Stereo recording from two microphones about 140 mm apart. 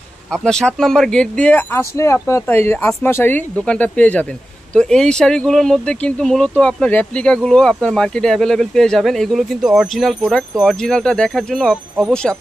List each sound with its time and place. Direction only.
0.3 s speech: 5° left (ahead or behind)